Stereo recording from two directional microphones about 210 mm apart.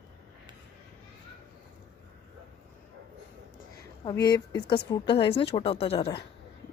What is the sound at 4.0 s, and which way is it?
A woman's voice, 20° left (ahead or behind).